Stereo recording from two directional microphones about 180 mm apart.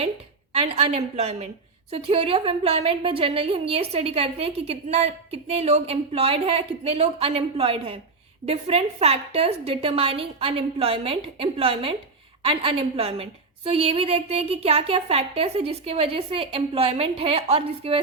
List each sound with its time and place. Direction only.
0.5 s a woman's voice: 35° right (ahead or behind)